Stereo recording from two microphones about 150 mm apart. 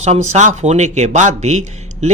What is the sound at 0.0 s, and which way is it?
A man's voice, 50° right (ahead or behind).